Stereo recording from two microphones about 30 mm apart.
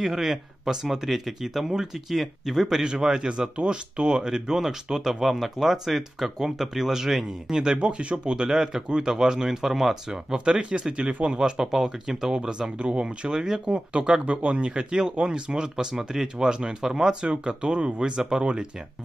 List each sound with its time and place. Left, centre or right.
0.0 s speech: centre
2.8 s speech: right
4.8 s speech: centre; by 8.5 s right
8.5 s speech: centre
10.3 s speech: right
11.6 s speech: centre
12.7 s speech: right
14.2 s speech: right; by 16.4 s centre
16.4 s speech: right